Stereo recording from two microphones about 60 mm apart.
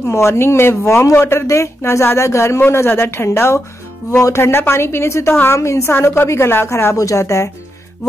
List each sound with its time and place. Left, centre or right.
0.0 s a woman's voice: left
2.6 s a woman's voice: left
7.0 s speech: left